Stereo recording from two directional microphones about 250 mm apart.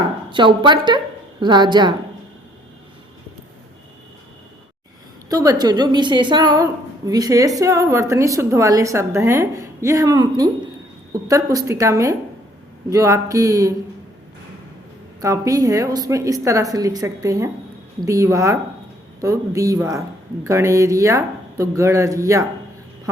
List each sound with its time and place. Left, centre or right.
0.3 s a woman's voice: centre
5.3 s a woman's voice: centre
15.2 s a woman's voice: centre